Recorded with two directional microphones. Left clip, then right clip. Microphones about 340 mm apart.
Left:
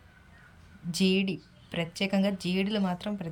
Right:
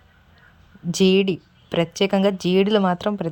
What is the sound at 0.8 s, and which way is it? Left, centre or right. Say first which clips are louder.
A woman's voice: right 11 dB; centre.